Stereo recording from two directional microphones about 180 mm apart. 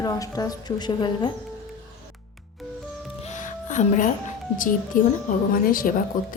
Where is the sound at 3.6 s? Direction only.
45° left (ahead or behind).